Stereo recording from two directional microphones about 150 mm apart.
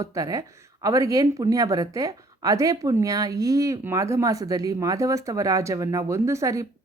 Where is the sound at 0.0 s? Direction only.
20° right (ahead or behind).